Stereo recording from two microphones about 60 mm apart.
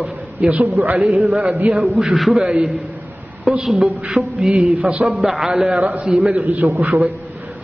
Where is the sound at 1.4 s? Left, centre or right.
Right.